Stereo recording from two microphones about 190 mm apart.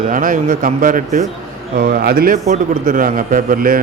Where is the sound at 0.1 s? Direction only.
45° right (ahead or behind).